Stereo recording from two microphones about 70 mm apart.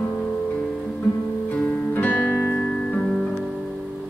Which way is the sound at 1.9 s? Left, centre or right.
Left.